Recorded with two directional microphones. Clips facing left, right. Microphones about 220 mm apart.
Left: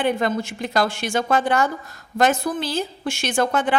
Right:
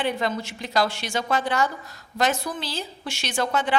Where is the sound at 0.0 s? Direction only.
50° left (ahead or behind).